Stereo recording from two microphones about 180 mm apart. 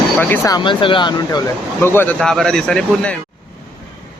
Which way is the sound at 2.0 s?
5° left (ahead or behind).